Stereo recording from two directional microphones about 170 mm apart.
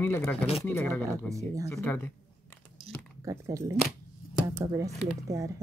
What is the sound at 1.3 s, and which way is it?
Speech, 20° right (ahead or behind).